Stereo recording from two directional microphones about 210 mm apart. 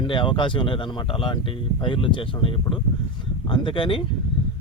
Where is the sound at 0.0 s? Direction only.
25° left (ahead or behind).